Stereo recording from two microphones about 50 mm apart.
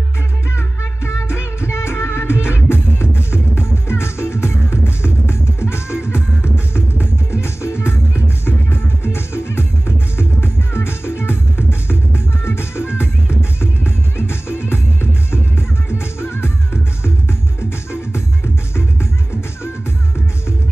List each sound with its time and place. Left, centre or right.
0.6 s music: left